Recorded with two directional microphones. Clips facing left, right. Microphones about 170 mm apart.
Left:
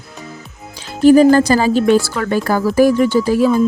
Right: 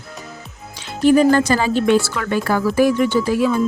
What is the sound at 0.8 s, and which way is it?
Speech, 35° left (ahead or behind).